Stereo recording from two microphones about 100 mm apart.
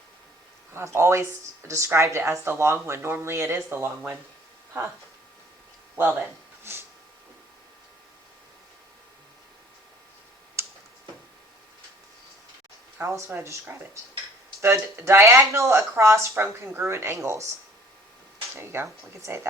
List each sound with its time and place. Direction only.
0.7 s speech: 25° right (ahead or behind)
13.0 s speech: 25° right (ahead or behind)
18.5 s speech: 25° right (ahead or behind)